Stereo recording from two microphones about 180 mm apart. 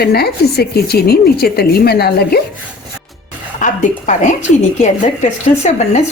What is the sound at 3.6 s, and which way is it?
A woman's voice, 40° left (ahead or behind).